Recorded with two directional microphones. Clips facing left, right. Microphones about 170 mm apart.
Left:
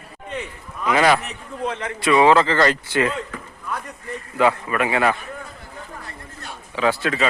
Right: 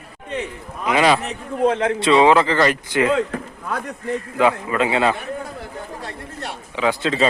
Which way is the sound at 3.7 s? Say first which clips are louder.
Right 4 dB; 80° right.